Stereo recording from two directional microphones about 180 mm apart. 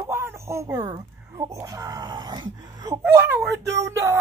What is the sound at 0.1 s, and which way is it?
A child's voice, 15° right (ahead or behind).